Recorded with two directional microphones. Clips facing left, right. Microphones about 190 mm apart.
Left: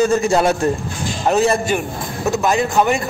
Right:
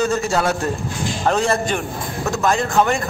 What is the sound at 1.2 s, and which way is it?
A man's voice, 10° left (ahead or behind).